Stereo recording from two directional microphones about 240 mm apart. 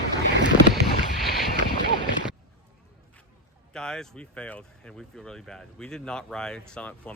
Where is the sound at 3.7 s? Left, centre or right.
Centre.